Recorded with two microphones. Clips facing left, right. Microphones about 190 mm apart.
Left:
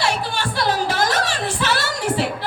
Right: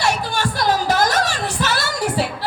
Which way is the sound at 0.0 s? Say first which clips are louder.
Right 2 dB; 40° right (ahead or behind).